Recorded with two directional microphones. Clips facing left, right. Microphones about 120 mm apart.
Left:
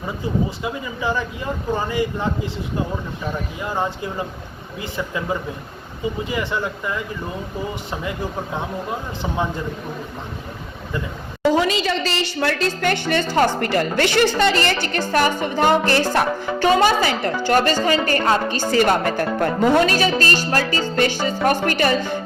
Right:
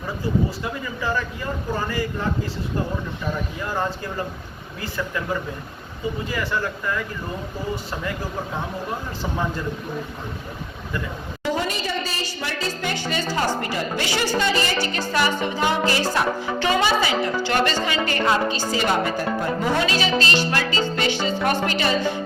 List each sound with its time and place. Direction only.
0.6 s speech: 15° left (ahead or behind)
3.6 s speech: 15° left (ahead or behind)
11.5 s a woman's voice: 90° left; by 22.2 s 50° left (ahead or behind)